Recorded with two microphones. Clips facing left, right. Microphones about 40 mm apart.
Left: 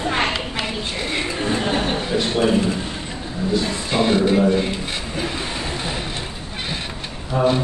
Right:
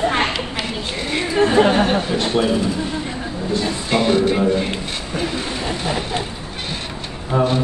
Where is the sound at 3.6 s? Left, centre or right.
Centre.